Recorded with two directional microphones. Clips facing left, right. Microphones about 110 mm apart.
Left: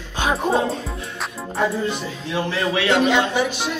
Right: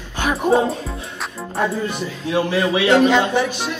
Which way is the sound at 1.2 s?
Centre (ahead or behind).